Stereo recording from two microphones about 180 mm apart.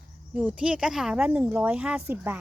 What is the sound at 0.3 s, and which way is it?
Speech, 5° right (ahead or behind).